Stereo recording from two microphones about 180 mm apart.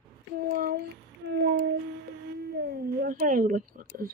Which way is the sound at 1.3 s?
70° right (ahead or behind).